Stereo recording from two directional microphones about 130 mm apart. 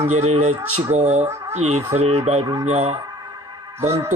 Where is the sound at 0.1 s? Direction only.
55° right (ahead or behind).